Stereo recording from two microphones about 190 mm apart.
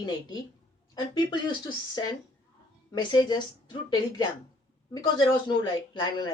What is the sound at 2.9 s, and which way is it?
Speech, 25° left (ahead or behind).